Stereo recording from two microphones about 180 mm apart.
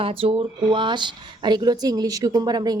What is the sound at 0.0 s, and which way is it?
A woman's voice, 30° right (ahead or behind).